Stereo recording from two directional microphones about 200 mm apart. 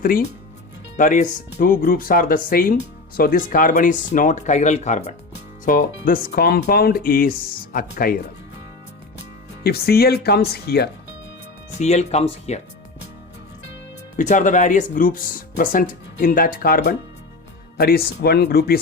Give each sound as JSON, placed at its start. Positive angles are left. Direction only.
{"t": 0.0, "sound": "speech", "side_deg": 45}
{"t": 5.6, "sound": "speech", "side_deg": 45}
{"t": 9.6, "sound": "speech", "side_deg": 50}
{"t": 11.8, "sound": "speech", "side_deg": 35}
{"t": 14.2, "sound": "speech", "side_deg": 40}